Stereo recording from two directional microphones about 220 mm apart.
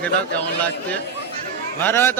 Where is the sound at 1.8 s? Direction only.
10° left (ahead or behind).